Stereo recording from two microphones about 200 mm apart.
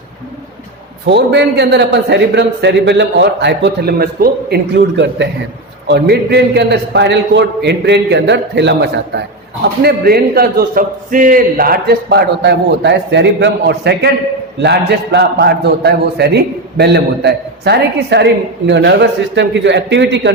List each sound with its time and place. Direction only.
1.0 s a man's voice: 60° right (ahead or behind)